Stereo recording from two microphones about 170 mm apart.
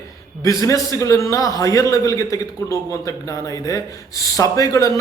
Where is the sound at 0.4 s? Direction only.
20° left (ahead or behind).